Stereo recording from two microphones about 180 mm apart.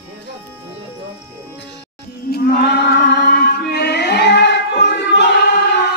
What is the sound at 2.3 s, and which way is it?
Music, 60° left (ahead or behind).